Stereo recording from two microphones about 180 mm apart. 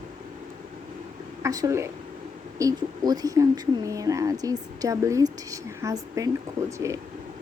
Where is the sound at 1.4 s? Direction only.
20° right (ahead or behind).